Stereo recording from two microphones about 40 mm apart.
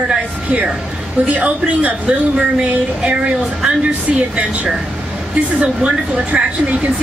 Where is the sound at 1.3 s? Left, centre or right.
Right.